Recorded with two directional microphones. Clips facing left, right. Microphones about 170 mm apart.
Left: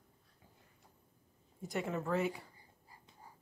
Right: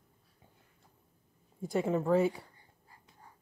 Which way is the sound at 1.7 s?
30° right (ahead or behind).